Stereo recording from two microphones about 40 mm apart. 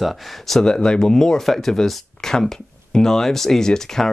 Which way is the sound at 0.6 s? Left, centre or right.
Centre.